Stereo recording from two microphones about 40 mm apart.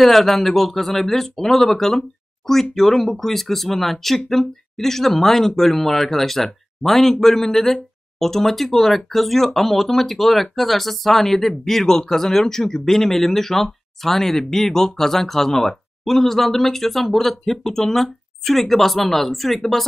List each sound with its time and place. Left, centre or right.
0.0 s speech: centre